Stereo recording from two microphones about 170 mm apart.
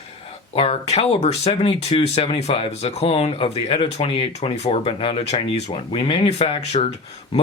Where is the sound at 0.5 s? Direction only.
35° left (ahead or behind).